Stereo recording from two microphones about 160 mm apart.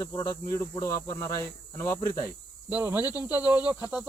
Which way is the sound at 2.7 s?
10° right (ahead or behind).